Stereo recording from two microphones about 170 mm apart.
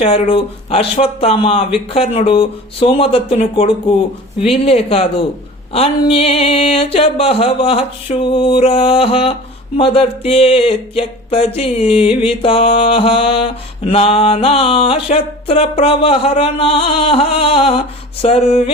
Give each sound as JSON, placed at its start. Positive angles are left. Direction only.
{"t": 0.0, "sound": "speech", "side_deg": 35}